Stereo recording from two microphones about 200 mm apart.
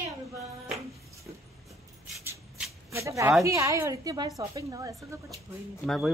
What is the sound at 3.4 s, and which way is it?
A woman's voice, 15° right (ahead or behind).